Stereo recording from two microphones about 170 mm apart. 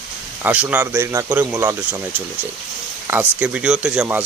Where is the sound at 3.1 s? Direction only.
10° right (ahead or behind).